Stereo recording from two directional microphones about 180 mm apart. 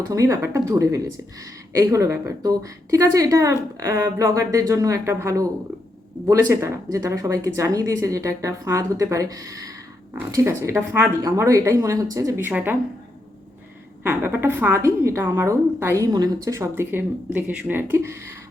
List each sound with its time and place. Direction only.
0.1 s a woman's voice: 15° right (ahead or behind)
14.0 s a woman's voice: 10° right (ahead or behind)